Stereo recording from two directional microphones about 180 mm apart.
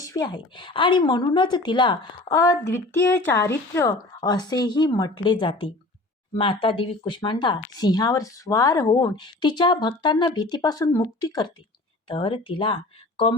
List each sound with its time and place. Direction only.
0.0 s speech: 20° left (ahead or behind)